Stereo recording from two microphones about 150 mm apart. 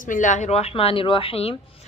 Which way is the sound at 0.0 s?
60° left (ahead or behind).